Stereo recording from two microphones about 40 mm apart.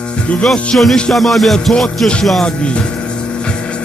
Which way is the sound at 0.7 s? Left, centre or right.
Left.